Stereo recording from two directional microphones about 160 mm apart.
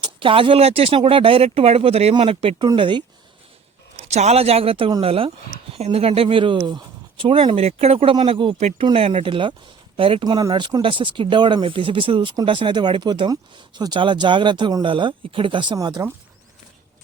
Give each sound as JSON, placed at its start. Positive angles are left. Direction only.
{"t": 0.0, "sound": "speech", "side_deg": -35}
{"t": 4.1, "sound": "speech", "side_deg": -45}